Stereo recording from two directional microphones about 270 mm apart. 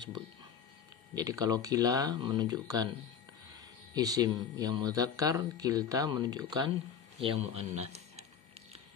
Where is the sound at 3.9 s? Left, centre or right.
Centre.